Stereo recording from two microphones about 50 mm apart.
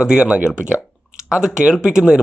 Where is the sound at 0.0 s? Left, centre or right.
Centre.